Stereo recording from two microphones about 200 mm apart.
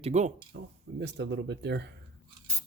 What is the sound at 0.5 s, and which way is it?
Speech, 60° right (ahead or behind).